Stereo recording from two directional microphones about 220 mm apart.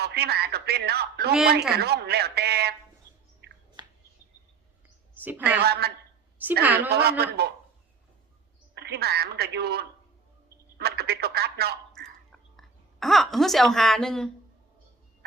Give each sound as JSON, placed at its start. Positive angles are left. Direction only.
{"t": 0.0, "sound": "a man's voice", "side_deg": -45}
{"t": 5.1, "sound": "a sound", "side_deg": -10}
{"t": 5.6, "sound": "a man's voice", "side_deg": -45}
{"t": 6.4, "sound": "a woman's voice", "side_deg": -10}
{"t": 6.9, "sound": "a man's voice", "side_deg": -45}
{"t": 8.7, "sound": "a man's voice", "side_deg": -45}
{"t": 12.5, "sound": "a woman's voice", "side_deg": 0}